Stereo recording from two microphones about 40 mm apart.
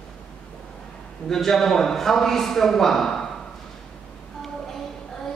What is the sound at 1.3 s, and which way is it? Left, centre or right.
Speech, centre.